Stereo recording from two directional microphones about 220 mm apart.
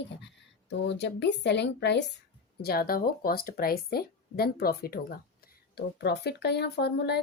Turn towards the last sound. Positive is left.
turn(degrees=50)  # may be behind; listen again after turning